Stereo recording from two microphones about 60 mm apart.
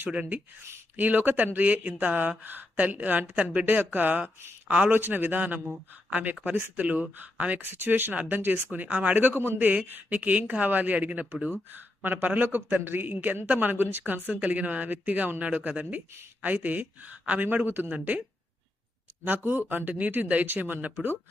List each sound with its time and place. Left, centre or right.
0.1 s speech: centre
0.9 s a man's voice: right
19.2 s a man's voice: right